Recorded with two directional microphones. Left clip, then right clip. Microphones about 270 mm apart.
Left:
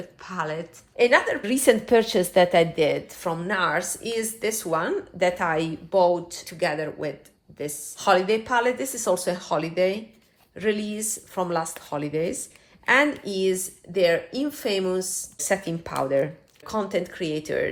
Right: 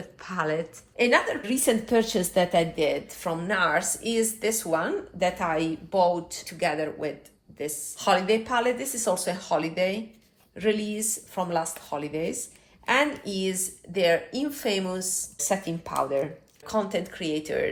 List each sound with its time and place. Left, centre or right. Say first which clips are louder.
0.2 s speech: right 2 dB; centre
0.9 s speech: left 3 dB; left